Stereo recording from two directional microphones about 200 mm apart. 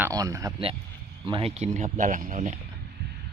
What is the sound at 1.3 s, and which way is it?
Speech, 25° right (ahead or behind).